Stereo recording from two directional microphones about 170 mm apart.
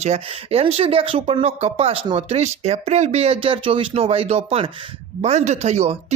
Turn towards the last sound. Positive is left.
turn(degrees=-40)  # may be behind; listen again after turning